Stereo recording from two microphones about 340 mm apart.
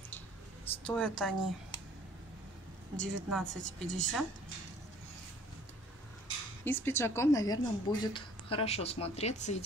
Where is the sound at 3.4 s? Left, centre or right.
Right.